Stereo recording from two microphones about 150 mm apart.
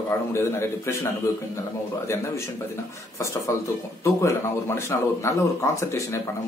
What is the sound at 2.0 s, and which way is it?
Speech, 20° left (ahead or behind).